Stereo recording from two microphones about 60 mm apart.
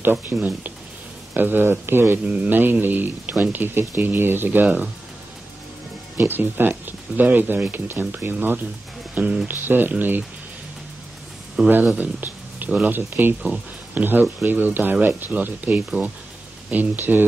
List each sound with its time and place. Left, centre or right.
0.1 s speech: right
2.2 s speech: right
6.1 s speech: right
9.1 s speech: centre
9.5 s speech: right
11.6 s speech: centre
12.0 s speech: right